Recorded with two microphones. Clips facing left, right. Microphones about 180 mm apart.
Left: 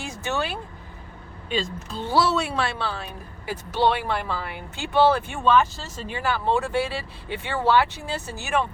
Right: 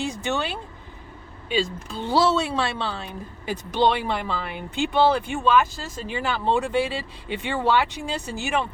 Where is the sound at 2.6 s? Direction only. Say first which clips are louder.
Even; 20° right (ahead or behind).